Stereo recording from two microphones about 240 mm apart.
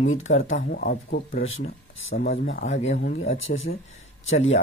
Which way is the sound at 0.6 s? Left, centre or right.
Left.